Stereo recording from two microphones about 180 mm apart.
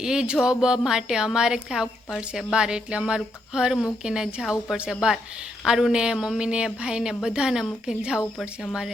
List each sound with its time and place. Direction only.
0.0 s a woman's voice: 5° right (ahead or behind)